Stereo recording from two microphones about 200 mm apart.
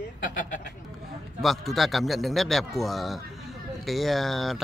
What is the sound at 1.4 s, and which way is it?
Speech, centre (ahead or behind).